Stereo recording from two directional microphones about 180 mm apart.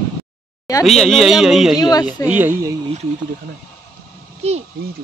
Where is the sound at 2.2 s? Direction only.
10° right (ahead or behind).